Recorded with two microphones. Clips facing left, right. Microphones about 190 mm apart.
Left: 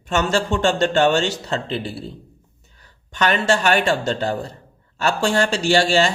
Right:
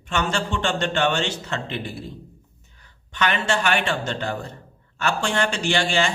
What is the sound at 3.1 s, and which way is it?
Speech, 40° left (ahead or behind).